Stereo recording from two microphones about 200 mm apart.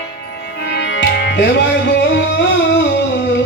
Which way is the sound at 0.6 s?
60° left (ahead or behind).